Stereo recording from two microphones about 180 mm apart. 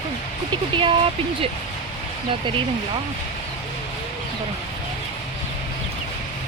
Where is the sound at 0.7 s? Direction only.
30° right (ahead or behind).